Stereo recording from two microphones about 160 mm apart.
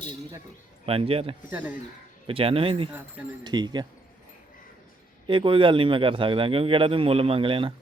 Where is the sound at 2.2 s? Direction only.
35° right (ahead or behind).